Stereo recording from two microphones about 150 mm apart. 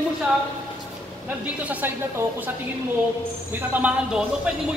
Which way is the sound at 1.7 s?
10° right (ahead or behind).